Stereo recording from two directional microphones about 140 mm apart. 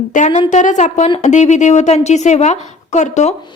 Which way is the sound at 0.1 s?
60° left (ahead or behind).